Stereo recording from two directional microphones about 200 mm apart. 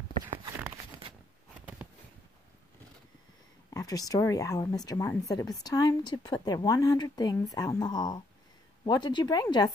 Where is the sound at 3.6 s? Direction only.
15° left (ahead or behind).